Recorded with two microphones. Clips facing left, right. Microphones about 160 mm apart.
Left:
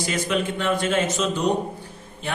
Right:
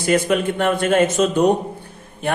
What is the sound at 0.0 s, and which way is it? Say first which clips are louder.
Speech: right 7 dB; 55° right (ahead or behind).